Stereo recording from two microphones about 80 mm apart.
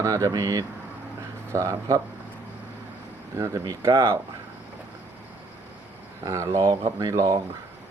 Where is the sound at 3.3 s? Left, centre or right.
Right.